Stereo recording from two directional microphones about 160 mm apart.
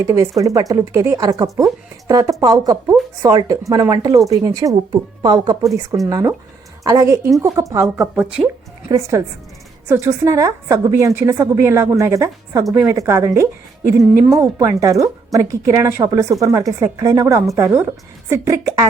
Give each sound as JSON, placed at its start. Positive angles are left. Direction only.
{"t": 0.0, "sound": "a woman's voice", "side_deg": -20}
{"t": 8.9, "sound": "a woman's voice", "side_deg": -20}